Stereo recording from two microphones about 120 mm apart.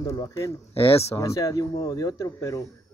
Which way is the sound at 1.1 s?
25° left (ahead or behind).